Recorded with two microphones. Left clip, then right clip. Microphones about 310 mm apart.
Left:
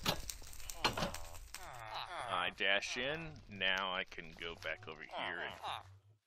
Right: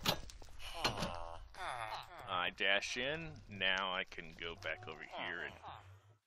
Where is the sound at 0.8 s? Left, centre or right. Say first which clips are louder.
Left 2 dB; centre.